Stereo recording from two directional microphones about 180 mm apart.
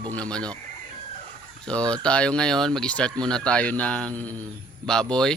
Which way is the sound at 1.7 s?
5° left (ahead or behind).